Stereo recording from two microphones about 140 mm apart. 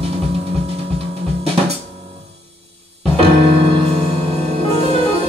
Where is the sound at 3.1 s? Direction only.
40° right (ahead or behind).